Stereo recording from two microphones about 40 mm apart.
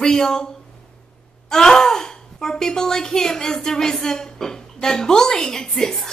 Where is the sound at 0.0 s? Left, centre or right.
Centre.